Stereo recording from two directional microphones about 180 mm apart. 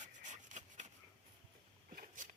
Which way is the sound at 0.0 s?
45° right (ahead or behind).